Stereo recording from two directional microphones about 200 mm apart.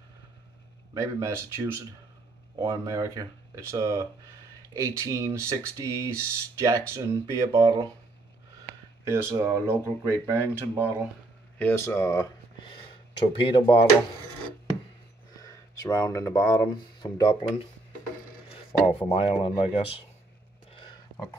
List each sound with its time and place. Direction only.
0.9 s speech: 15° right (ahead or behind)
9.0 s speech: 15° right (ahead or behind)
11.5 s a sound: 10° left (ahead or behind)
13.3 s speech: 25° left (ahead or behind)
15.4 s speech: 15° left (ahead or behind)
19.0 s speech: 25° left (ahead or behind)